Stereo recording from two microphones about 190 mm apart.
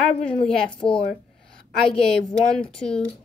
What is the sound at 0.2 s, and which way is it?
Speech, 5° left (ahead or behind).